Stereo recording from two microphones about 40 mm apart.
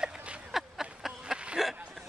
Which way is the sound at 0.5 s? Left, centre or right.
Centre.